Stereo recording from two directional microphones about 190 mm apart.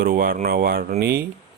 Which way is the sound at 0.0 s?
50° right (ahead or behind).